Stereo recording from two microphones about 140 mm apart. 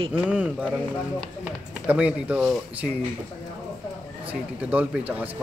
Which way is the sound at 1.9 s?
10° right (ahead or behind).